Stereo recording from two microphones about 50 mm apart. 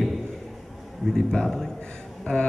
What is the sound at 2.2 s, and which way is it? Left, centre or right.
Speech, centre.